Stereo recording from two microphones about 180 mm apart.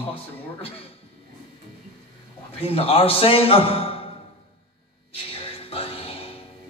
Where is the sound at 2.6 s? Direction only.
30° left (ahead or behind).